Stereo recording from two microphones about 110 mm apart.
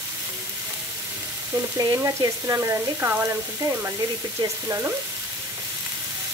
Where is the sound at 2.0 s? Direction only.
25° right (ahead or behind).